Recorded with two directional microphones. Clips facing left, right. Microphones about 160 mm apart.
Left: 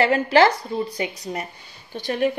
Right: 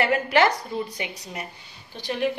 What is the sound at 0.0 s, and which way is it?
A woman's voice, 30° left (ahead or behind).